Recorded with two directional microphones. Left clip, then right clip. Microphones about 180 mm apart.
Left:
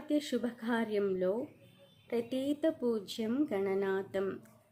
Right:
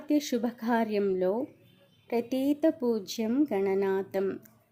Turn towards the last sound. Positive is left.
turn(degrees=-30)  # may be behind; listen again after turning